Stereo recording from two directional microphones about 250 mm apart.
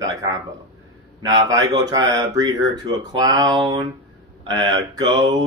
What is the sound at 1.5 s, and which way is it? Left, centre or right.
Speech, centre.